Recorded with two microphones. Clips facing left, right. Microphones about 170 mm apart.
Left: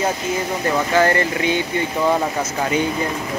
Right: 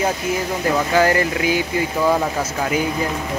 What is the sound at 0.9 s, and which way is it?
Speech, 5° right (ahead or behind).